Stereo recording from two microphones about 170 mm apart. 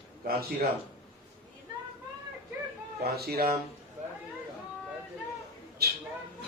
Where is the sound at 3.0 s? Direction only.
65° right (ahead or behind).